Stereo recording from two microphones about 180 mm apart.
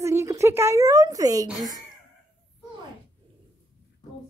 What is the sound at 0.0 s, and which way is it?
A woman's voice, 15° right (ahead or behind).